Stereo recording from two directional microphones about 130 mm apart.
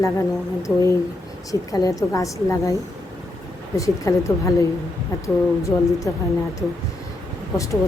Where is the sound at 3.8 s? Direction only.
25° left (ahead or behind).